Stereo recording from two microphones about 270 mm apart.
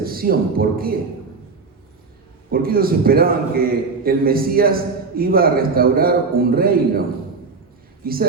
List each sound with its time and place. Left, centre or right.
0.0 s speech: right
2.5 s a man's voice: right
8.0 s a man's voice: right